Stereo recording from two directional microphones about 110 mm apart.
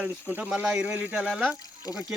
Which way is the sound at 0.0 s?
10° right (ahead or behind).